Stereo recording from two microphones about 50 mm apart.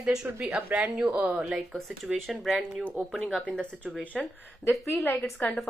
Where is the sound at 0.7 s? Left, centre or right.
Right.